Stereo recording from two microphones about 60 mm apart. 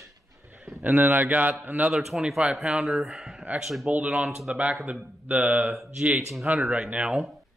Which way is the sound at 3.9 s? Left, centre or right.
Right.